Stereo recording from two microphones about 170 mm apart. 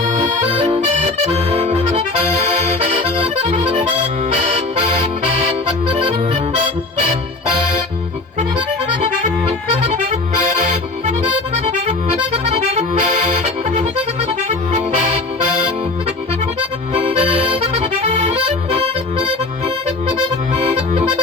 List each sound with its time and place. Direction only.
0.0 s accordion: 45° right (ahead or behind)
1.5 s accordion: 35° right (ahead or behind)
11.5 s accordion: 40° right (ahead or behind)
16.9 s accordion: 35° right (ahead or behind)
18.7 s music: 35° right (ahead or behind)
20.6 s accordion: 40° right (ahead or behind)